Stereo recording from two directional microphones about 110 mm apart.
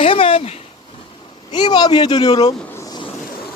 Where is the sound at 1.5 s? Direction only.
40° left (ahead or behind).